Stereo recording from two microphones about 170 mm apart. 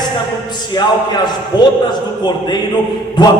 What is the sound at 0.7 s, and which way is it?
A man's voice, 25° left (ahead or behind).